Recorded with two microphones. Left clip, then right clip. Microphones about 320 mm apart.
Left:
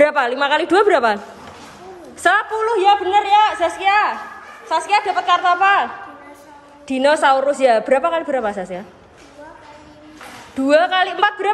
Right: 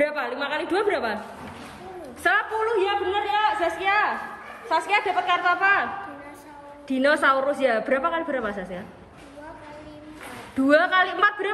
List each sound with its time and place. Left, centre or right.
0.0 s a woman's voice: centre
2.2 s a woman's voice: centre
6.9 s a woman's voice: centre
10.7 s a woman's voice: centre